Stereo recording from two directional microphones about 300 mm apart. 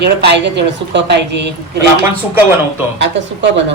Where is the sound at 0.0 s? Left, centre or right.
Right.